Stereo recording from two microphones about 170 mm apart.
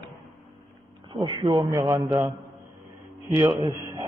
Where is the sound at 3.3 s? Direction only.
15° right (ahead or behind).